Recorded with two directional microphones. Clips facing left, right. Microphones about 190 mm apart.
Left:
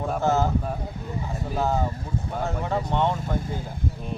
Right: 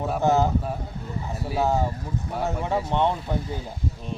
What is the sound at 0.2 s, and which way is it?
Speech, 15° right (ahead or behind).